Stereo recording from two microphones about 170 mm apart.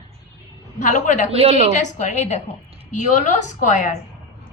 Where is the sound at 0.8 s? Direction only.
45° left (ahead or behind).